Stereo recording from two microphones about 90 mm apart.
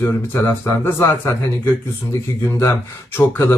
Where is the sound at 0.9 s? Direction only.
30° left (ahead or behind).